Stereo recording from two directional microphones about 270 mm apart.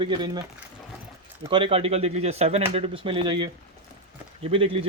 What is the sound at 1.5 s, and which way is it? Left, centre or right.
Speech, centre.